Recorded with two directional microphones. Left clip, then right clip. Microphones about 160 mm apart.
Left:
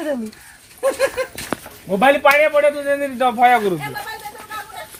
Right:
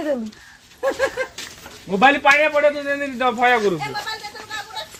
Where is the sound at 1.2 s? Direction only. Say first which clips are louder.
Left 2 dB; 45° left (ahead or behind).